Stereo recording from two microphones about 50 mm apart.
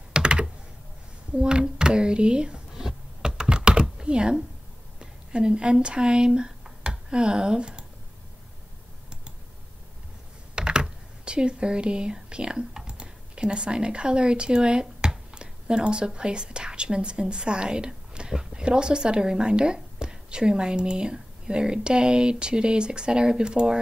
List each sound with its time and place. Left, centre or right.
0.1 s computer keyboard: centre
1.4 s a sound: centre
4.0 s speech: centre
4.9 s a sound: centre
7.1 s speech: centre
10.5 s speech: centre